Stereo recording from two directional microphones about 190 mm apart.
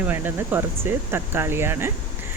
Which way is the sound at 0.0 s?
10° right (ahead or behind).